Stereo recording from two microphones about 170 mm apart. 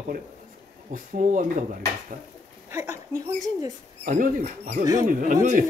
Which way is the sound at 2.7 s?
15° right (ahead or behind).